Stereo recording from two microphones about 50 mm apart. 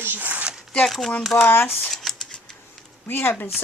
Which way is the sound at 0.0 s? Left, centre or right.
Right.